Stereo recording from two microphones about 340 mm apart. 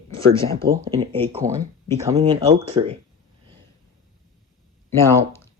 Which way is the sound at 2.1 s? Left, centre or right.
Centre.